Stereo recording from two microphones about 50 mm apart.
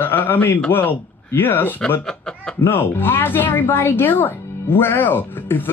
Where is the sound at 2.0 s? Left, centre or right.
Centre.